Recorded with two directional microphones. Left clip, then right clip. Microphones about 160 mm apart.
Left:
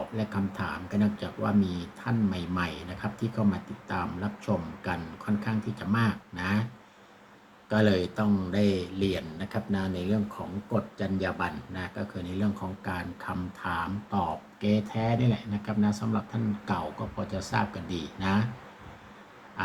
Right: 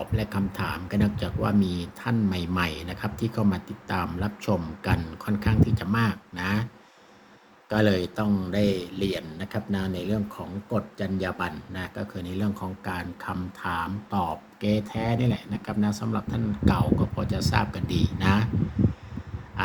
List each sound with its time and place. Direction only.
0.2 s speech: 65° right (ahead or behind)
7.7 s speech: 55° right (ahead or behind)
19.6 s pig: 60° right (ahead or behind)